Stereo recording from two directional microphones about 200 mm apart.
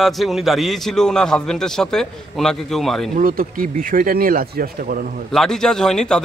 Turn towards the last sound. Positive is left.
turn(degrees=5)  # may be behind; listen again after turning